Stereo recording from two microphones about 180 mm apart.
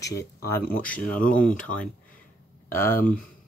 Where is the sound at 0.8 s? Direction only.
10° left (ahead or behind).